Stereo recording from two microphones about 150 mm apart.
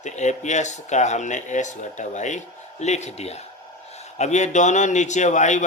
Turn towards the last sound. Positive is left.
turn(degrees=55)  # may be behind; listen again after turning